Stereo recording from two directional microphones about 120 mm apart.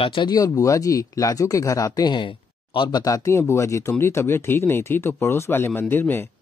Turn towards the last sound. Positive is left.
turn(degrees=20)  # may be behind; listen again after turning